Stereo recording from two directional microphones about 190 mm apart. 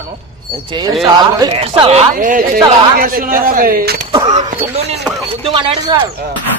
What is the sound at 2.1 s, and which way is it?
Speech, 45° right (ahead or behind).